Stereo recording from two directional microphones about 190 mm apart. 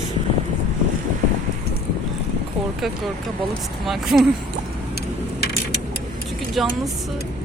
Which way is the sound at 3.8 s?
Centre (ahead or behind).